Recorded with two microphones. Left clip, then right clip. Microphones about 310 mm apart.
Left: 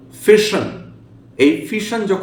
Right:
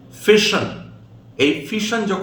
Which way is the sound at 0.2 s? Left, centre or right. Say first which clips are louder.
Left 2 dB; centre.